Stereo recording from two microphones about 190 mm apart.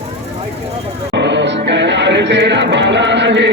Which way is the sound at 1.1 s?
70° right (ahead or behind).